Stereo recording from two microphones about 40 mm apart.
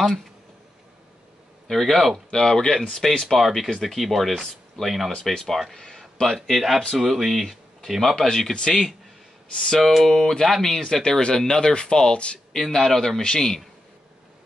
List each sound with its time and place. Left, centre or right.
1.7 s speech: centre
2.3 s speech: centre
5.8 s a sound: centre
6.4 s speech: centre
8.2 s speech: centre
9.8 s speech: centre; by 12.4 s left
12.5 s speech: centre